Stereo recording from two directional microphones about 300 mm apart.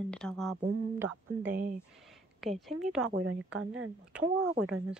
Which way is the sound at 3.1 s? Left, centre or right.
Right.